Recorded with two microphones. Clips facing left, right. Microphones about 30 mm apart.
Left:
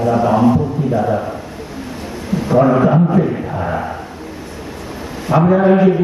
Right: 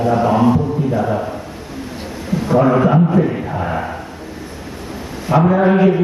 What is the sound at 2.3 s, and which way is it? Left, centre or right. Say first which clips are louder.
Speech: left 1 dB; centre.